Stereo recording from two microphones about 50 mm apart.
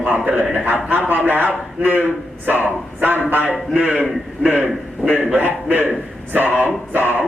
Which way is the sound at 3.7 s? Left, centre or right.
Right.